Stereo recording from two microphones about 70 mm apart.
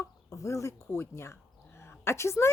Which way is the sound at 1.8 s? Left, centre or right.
Left.